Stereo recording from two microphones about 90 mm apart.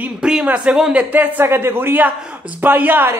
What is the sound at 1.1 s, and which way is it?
Speech, 20° right (ahead or behind).